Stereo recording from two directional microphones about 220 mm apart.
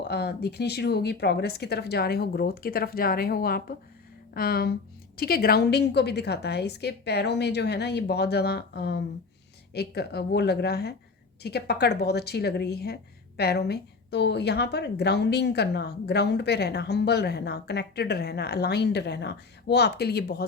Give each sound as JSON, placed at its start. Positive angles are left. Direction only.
{"t": 0.1, "sound": "a woman's voice", "side_deg": 45}